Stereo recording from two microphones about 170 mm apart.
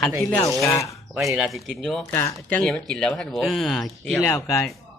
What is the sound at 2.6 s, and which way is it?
Speech, centre (ahead or behind).